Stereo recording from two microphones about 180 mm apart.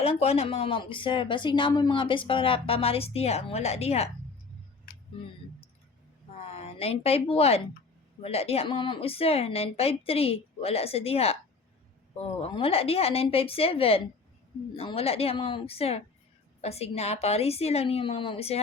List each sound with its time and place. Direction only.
0.0 s speech: 35° left (ahead or behind)
6.4 s speech: 35° left (ahead or behind)